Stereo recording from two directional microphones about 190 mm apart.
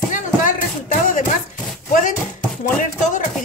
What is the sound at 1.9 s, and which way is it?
Speech, 45° left (ahead or behind).